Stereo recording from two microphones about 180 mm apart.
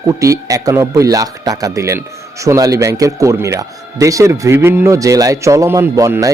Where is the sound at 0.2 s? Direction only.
20° right (ahead or behind).